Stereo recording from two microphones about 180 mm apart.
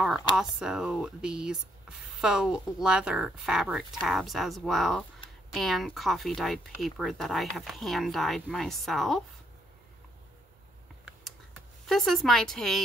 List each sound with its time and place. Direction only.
0.6 s speech: 5° right (ahead or behind)
11.8 s speech: centre (ahead or behind)